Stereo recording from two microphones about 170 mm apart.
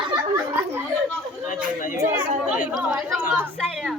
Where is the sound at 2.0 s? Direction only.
10° right (ahead or behind).